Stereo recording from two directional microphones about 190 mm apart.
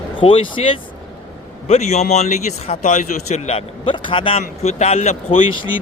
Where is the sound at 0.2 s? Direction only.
30° left (ahead or behind).